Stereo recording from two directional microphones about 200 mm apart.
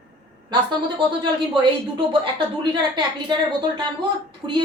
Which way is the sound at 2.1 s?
25° right (ahead or behind).